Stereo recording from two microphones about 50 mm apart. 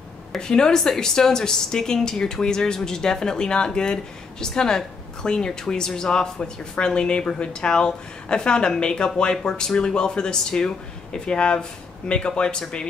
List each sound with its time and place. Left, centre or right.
0.4 s a woman's voice: centre